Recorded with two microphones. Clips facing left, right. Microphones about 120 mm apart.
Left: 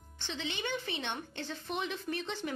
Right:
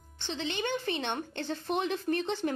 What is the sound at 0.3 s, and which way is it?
A woman's voice, 35° right (ahead or behind).